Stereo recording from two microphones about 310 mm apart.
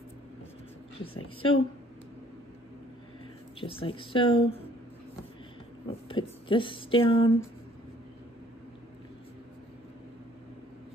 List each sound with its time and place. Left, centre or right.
1.0 s speech: centre
3.6 s speech: centre
5.9 s speech: centre